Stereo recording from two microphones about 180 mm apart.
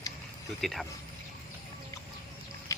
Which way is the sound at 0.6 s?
Centre (ahead or behind).